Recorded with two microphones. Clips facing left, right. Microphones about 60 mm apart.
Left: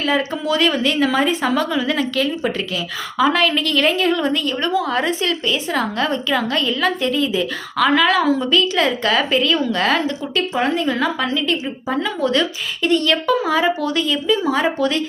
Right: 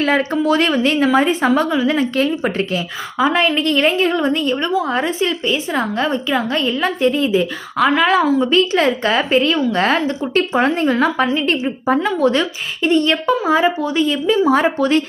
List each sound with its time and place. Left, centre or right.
0.0 s speech: right
3.2 s a woman's voice: right
4.6 s a woman's voice: centre
8.2 s a woman's voice: centre
8.4 s speech: right
10.5 s speech: right
12.8 s a woman's voice: right
14.5 s speech: right